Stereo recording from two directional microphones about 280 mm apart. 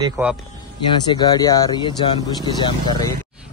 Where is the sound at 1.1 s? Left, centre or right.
Centre.